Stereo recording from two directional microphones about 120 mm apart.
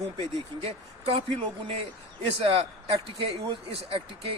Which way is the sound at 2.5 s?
50° right (ahead or behind).